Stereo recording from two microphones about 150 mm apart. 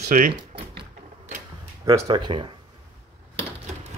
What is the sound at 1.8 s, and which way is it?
Speech, 25° right (ahead or behind).